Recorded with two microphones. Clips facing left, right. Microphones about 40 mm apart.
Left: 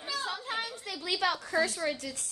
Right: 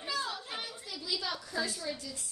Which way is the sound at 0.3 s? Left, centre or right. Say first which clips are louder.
Left 5 dB; left.